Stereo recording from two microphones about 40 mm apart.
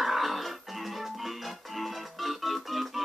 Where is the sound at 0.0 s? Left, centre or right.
Centre.